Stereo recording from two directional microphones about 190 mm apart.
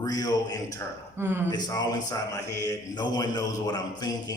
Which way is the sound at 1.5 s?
20° left (ahead or behind).